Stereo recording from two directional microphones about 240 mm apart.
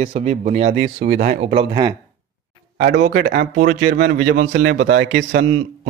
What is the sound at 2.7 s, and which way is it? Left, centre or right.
Speech, right.